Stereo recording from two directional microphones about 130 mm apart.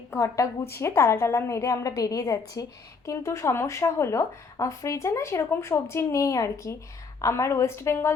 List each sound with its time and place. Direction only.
0.1 s speech: 25° left (ahead or behind)